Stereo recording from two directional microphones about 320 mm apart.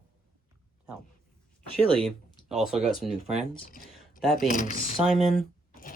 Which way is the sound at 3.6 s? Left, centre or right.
Left.